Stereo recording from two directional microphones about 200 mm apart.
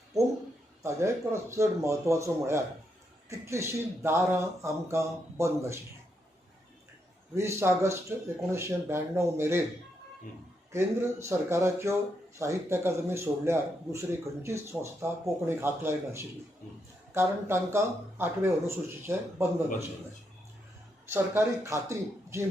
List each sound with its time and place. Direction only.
0.8 s speech: 15° right (ahead or behind)
7.3 s speech: 15° right (ahead or behind)
10.7 s speech: 15° right (ahead or behind)
21.1 s speech: 15° right (ahead or behind)